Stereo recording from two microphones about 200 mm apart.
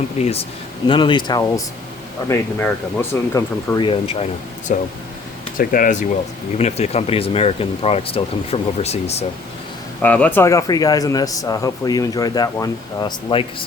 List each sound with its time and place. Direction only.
0.9 s a man's voice: 25° left (ahead or behind)
3.8 s speech: 25° left (ahead or behind)
10.0 s a man's voice: 10° left (ahead or behind)